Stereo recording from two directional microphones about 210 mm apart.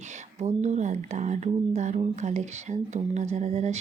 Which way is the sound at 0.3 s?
35° right (ahead or behind).